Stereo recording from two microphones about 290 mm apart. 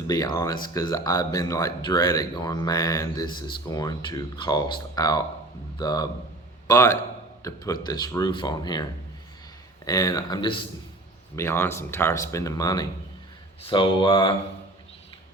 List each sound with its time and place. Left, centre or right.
0.1 s a man's voice: centre